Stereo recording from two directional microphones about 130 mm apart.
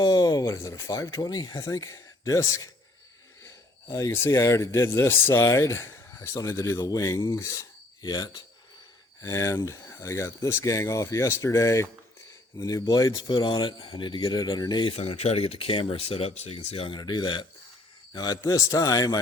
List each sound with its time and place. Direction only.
0.0 s speech: 30° left (ahead or behind)
14.9 s speech: 50° left (ahead or behind)
17.0 s speech: 35° left (ahead or behind)